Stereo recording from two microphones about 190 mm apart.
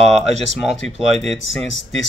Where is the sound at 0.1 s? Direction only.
Centre (ahead or behind).